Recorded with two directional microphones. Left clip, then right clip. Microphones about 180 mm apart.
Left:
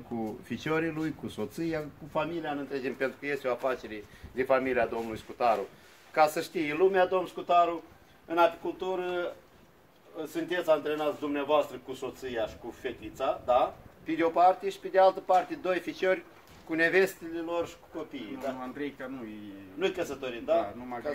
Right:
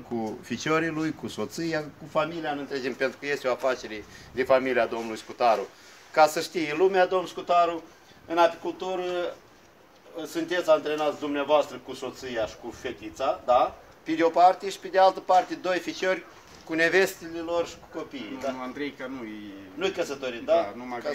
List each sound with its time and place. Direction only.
0.2 s speech: 10° right (ahead or behind)
18.6 s speech: 10° left (ahead or behind)
19.8 s speech: 5° right (ahead or behind)
20.5 s speech: 10° left (ahead or behind)